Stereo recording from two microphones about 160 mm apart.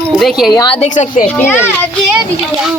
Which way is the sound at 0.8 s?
50° left (ahead or behind).